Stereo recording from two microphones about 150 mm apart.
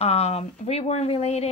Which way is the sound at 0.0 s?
45° left (ahead or behind).